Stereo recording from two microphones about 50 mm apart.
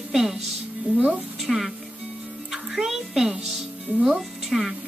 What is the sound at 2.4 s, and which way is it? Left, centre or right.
Music, centre.